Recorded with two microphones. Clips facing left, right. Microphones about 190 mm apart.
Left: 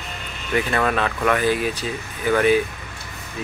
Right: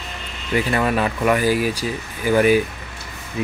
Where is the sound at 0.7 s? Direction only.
10° right (ahead or behind).